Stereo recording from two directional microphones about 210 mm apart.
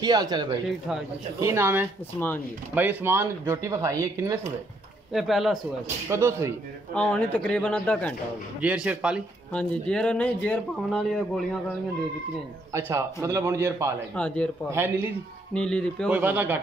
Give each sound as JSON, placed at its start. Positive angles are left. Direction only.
{"t": 0.0, "sound": "speech", "side_deg": -20}
{"t": 2.1, "sound": "speech", "side_deg": 10}
{"t": 2.7, "sound": "speech", "side_deg": -10}
{"t": 5.1, "sound": "speech", "side_deg": 0}
{"t": 6.0, "sound": "speech", "side_deg": -15}
{"t": 6.9, "sound": "speech", "side_deg": 5}
{"t": 8.5, "sound": "speech", "side_deg": -5}
{"t": 12.7, "sound": "speech", "side_deg": -10}
{"t": 14.1, "sound": "speech", "side_deg": 5}
{"t": 14.7, "sound": "speech", "side_deg": -10}
{"t": 15.5, "sound": "speech", "side_deg": 5}
{"t": 16.1, "sound": "speech", "side_deg": -10}